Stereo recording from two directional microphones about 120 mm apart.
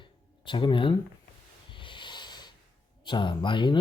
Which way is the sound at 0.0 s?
40° left (ahead or behind).